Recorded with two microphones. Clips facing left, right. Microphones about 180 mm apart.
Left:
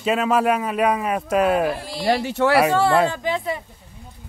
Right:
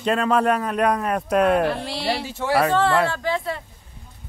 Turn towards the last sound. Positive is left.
turn(degrees=15)  # may be behind; listen again after turning